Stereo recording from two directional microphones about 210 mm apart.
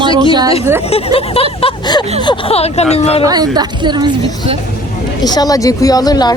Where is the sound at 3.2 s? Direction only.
20° right (ahead or behind).